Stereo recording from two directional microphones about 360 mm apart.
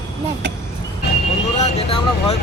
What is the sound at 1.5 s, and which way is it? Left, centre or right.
Vehicle, centre.